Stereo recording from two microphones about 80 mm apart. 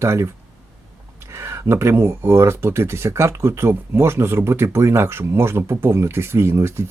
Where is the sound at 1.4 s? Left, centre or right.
Right.